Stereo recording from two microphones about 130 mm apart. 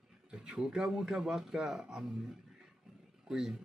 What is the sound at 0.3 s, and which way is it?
Speech, 5° right (ahead or behind).